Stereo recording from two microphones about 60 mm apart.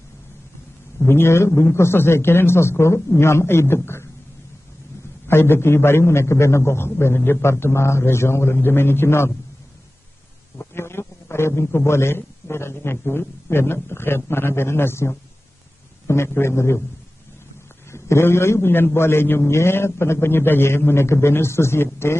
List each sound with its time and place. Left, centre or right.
1.0 s a man's voice: left
5.3 s a man's voice: left
10.6 s a sound: left
11.6 s a man's voice: left
17.9 s a man's voice: left